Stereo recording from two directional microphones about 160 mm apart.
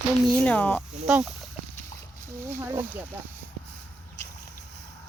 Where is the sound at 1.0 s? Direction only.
5° right (ahead or behind).